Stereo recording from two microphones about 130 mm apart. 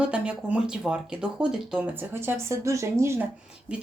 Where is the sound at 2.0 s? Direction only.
20° right (ahead or behind).